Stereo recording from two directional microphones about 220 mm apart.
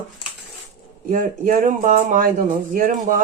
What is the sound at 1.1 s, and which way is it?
Speech, 35° right (ahead or behind).